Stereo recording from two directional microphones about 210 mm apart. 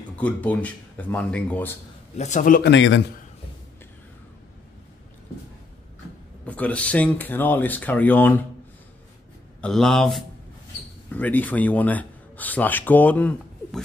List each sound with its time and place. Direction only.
0.1 s speech: 5° left (ahead or behind)
2.1 s a man's voice: 35° left (ahead or behind)
2.7 s a man's voice: 60° left (ahead or behind)
6.4 s speech: 5° left (ahead or behind)
9.6 s speech: centre (ahead or behind)